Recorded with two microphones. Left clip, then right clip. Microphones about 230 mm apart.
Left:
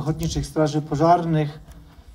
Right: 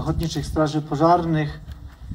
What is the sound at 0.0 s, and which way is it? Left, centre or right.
Speech, left.